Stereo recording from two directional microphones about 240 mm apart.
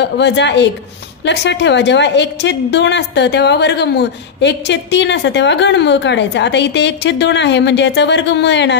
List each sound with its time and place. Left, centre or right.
0.0 s a woman's voice: left